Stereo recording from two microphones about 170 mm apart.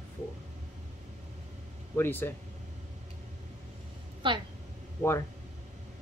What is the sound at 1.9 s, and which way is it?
Speech, 10° left (ahead or behind).